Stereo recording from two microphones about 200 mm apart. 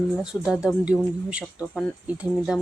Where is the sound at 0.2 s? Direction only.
Centre (ahead or behind).